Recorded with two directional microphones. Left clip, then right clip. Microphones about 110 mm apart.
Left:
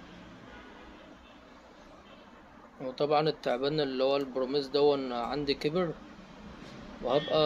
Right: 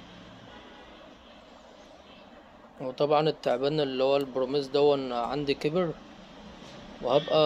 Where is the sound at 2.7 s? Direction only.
45° right (ahead or behind).